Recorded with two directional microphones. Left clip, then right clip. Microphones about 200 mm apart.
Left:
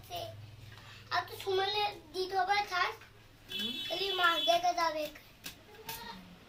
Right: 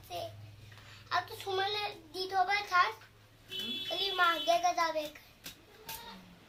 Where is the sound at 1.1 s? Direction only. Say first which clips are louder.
Right 1 dB; 35° right (ahead or behind).